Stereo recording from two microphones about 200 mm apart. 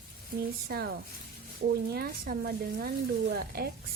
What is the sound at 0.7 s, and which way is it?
Speech, 50° right (ahead or behind).